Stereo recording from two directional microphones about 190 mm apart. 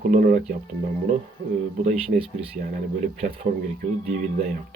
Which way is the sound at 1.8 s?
35° right (ahead or behind).